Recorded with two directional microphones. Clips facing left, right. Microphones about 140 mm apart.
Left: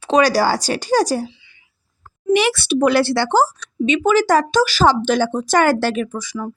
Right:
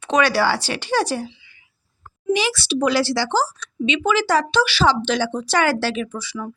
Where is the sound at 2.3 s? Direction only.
60° left (ahead or behind).